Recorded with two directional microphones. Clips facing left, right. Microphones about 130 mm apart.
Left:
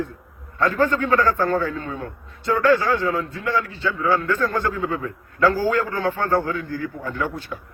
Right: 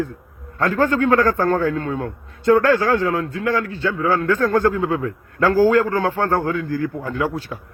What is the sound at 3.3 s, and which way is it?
A man's voice, 45° right (ahead or behind).